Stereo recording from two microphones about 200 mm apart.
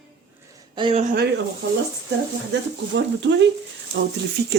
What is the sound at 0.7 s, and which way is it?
Speech, 25° right (ahead or behind).